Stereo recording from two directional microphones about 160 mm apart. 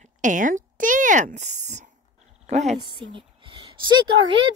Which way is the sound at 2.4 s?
45° right (ahead or behind).